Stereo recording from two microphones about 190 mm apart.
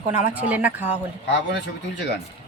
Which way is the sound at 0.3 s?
10° right (ahead or behind).